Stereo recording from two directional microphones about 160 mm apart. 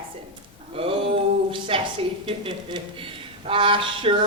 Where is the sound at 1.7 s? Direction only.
35° right (ahead or behind).